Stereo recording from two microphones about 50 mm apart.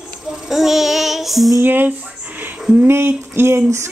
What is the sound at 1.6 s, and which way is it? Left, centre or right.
Speech, right.